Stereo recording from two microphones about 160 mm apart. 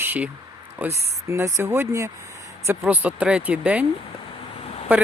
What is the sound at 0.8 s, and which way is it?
Speech, 15° right (ahead or behind).